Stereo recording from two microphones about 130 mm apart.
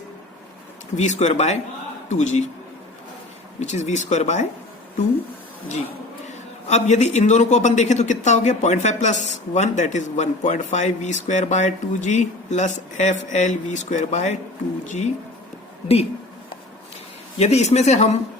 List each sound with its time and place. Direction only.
0.9 s a man's voice: 60° left (ahead or behind)
3.6 s a man's voice: 65° left (ahead or behind)
6.2 s a man's voice: 65° left (ahead or behind)
17.3 s a man's voice: 55° left (ahead or behind)